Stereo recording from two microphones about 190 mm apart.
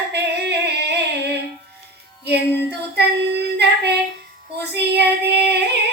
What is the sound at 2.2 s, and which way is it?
Child singing, 60° right (ahead or behind).